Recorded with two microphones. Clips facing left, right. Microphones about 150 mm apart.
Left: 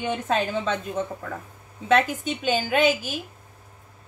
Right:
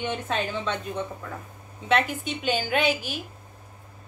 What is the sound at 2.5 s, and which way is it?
Speech, 45° left (ahead or behind).